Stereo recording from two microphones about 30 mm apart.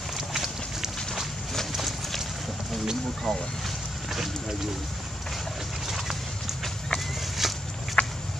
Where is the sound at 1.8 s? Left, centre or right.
Centre.